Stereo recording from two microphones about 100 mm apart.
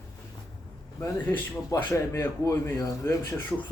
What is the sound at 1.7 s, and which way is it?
Speech, 30° left (ahead or behind).